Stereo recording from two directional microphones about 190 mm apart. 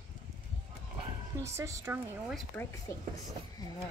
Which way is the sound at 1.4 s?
15° right (ahead or behind).